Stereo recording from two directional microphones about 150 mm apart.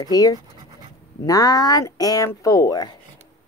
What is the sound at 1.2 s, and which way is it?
Speech, 25° left (ahead or behind).